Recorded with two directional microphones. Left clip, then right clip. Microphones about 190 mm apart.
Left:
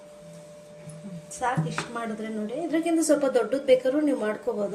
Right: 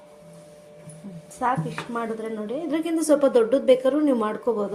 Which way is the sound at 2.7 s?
50° right (ahead or behind).